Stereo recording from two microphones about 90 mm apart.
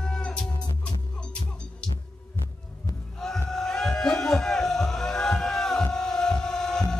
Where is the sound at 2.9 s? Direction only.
40° left (ahead or behind).